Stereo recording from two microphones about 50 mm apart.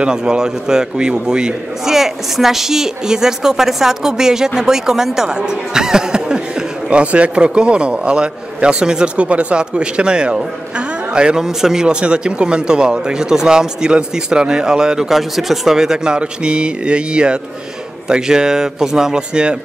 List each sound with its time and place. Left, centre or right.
0.0 s speech: centre